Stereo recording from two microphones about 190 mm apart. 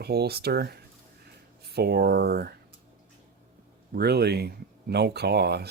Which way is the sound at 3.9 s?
55° right (ahead or behind).